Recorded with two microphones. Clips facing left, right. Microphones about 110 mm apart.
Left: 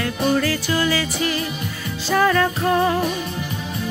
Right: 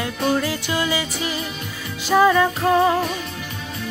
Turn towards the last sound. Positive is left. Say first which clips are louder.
# right 1 dB
turn(degrees=-5)  # may be behind; listen again after turning